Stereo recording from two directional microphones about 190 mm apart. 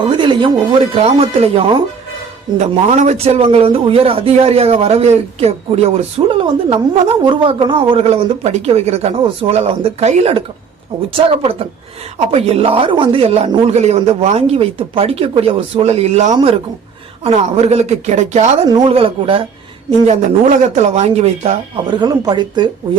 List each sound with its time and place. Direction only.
0.0 s a man's voice: 25° right (ahead or behind)
12.3 s a man's voice: 30° right (ahead or behind)
18.6 s a man's voice: 20° right (ahead or behind)